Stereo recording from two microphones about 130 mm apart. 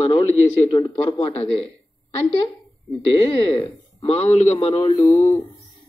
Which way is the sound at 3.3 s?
45° left (ahead or behind).